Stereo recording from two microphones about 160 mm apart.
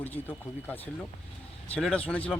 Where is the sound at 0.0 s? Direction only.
10° left (ahead or behind).